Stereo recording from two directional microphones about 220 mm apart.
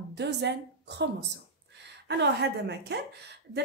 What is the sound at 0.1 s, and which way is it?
A woman's voice, 50° right (ahead or behind).